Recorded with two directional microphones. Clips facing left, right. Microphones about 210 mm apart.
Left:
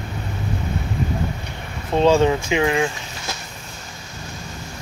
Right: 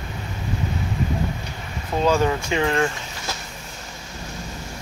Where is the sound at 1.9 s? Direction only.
25° left (ahead or behind).